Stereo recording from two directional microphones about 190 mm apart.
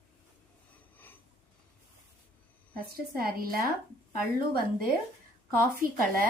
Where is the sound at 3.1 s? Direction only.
50° right (ahead or behind).